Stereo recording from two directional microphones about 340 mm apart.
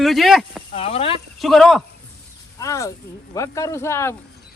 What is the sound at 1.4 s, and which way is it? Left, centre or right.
A man's voice, centre.